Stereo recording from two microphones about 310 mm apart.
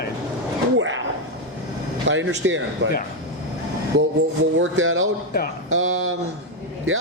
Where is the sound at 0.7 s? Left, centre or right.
Right.